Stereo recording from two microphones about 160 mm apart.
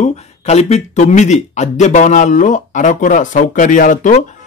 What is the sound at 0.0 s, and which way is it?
Speech, 40° left (ahead or behind).